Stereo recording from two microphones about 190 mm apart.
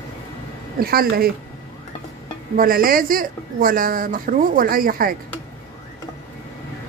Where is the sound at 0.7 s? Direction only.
50° right (ahead or behind).